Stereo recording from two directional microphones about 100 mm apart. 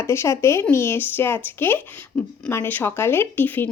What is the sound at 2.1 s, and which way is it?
Speech, 10° left (ahead or behind).